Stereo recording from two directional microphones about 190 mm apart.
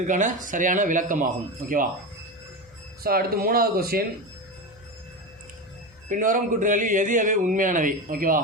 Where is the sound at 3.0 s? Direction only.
50° right (ahead or behind).